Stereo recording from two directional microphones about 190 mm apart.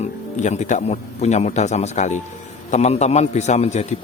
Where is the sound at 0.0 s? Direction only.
35° left (ahead or behind).